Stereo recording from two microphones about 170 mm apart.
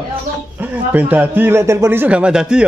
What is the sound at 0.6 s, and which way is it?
A man's voice, 10° right (ahead or behind).